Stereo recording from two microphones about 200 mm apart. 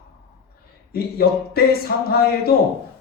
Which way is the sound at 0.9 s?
50° left (ahead or behind).